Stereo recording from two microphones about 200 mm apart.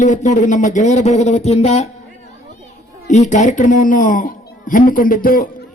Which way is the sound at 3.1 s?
35° left (ahead or behind).